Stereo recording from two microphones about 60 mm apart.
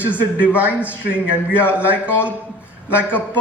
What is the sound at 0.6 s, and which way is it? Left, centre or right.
A man's voice, right.